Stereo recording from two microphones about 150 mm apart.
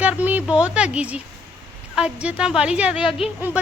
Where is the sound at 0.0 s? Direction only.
10° right (ahead or behind).